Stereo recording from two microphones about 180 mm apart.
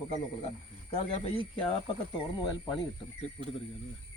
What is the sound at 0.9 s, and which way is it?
Speech, 30° left (ahead or behind).